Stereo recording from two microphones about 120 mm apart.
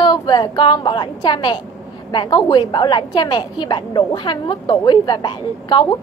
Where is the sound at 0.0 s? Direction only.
35° left (ahead or behind).